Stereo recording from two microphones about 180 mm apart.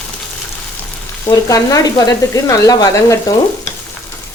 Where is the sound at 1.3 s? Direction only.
20° left (ahead or behind).